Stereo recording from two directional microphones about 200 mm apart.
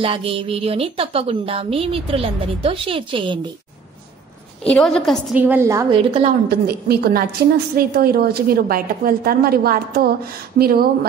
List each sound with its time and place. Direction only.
0.0 s a woman's voice: 30° right (ahead or behind)
4.6 s a woman's voice: 5° left (ahead or behind)
5.3 s a woman's voice: 10° right (ahead or behind)
5.9 s a woman's voice: 30° right (ahead or behind)
6.5 s a woman's voice: 50° right (ahead or behind)